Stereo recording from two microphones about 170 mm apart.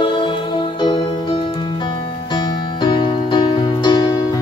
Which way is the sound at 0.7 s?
25° left (ahead or behind).